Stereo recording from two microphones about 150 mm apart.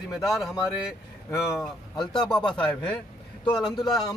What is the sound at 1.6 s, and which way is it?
A man's voice, 5° left (ahead or behind).